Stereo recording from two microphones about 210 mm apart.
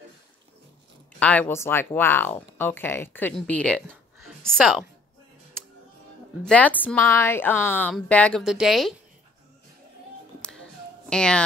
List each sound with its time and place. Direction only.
1.2 s a woman's voice: 10° left (ahead or behind)
3.7 s a sound: centre (ahead or behind)
4.5 s speech: centre (ahead or behind)
6.4 s a woman's voice: 5° left (ahead or behind)
11.1 s speech: 5° left (ahead or behind)